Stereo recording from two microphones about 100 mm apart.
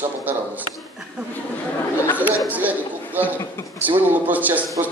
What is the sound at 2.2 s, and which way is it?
Chatter, 15° right (ahead or behind).